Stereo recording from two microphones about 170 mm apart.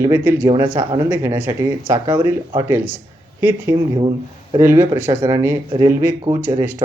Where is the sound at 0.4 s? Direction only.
25° right (ahead or behind).